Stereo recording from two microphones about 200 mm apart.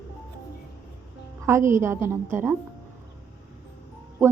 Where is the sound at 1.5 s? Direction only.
15° right (ahead or behind).